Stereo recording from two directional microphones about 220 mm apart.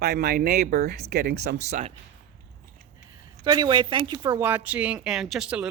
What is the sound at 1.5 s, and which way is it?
Speech, 30° right (ahead or behind).